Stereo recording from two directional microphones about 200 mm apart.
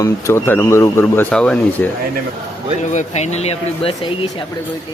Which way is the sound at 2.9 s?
35° left (ahead or behind).